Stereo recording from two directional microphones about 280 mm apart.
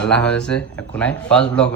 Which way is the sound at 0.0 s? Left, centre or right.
Centre.